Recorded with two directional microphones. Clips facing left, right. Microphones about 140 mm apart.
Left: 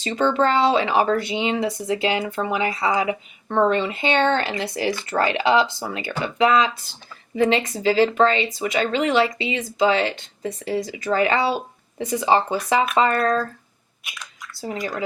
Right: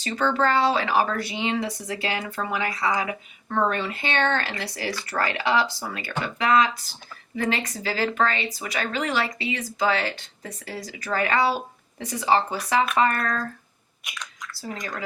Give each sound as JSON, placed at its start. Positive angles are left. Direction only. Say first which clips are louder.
{"t": 0.0, "sound": "a woman's voice", "louder": "left 4 dB", "side_deg": 20}
{"t": 14.0, "sound": "speech", "louder": "right 1 dB", "side_deg": 5}